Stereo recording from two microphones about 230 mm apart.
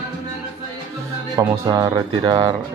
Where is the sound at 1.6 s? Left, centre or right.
Centre.